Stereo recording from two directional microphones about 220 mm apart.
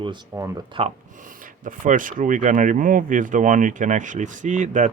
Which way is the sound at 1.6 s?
35° right (ahead or behind).